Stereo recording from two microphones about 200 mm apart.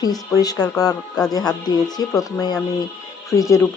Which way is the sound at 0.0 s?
20° left (ahead or behind).